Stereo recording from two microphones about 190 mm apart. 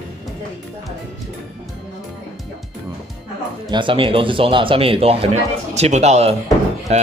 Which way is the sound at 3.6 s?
25° right (ahead or behind).